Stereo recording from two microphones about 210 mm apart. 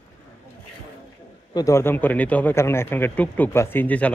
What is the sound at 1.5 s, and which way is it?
Speech, 15° left (ahead or behind).